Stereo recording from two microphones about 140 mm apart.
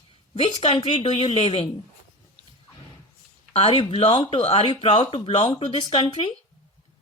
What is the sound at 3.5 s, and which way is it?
A woman's voice, 50° left (ahead or behind).